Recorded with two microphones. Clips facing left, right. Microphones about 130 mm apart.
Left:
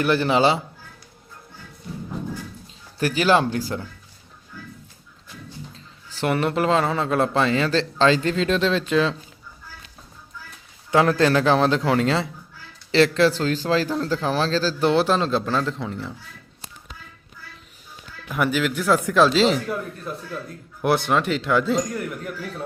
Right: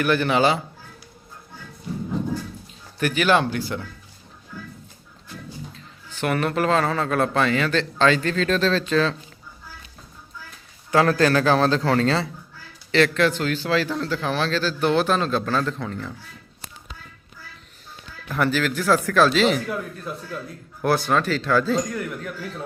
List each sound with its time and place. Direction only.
0.0 s a man's voice: 30° left (ahead or behind)
3.0 s a man's voice: 30° left (ahead or behind)
5.7 s a sound: 35° left (ahead or behind)
6.3 s a man's voice: 25° left (ahead or behind)
10.9 s a man's voice: 20° left (ahead or behind)
12.9 s a man's voice: 30° left (ahead or behind)
18.3 s a man's voice: 15° left (ahead or behind)
19.6 s speech: centre (ahead or behind)
20.8 s a man's voice: 20° left (ahead or behind)
21.9 s speech: 5° left (ahead or behind)